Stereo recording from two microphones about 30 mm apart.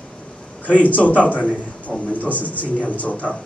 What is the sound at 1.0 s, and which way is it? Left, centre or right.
A man's voice, left.